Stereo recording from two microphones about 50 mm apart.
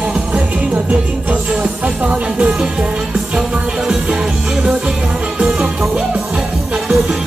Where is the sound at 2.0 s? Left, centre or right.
Right.